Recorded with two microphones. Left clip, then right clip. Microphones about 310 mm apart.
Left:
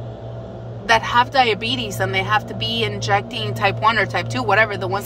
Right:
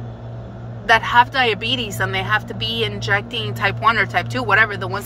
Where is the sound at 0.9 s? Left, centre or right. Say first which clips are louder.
Right 2 dB; centre.